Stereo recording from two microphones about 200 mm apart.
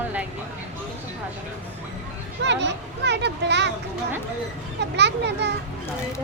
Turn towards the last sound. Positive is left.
turn(degrees=-60)  # may be behind; listen again after turning